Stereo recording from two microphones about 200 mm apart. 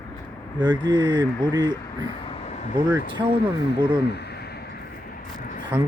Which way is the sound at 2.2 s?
30° left (ahead or behind).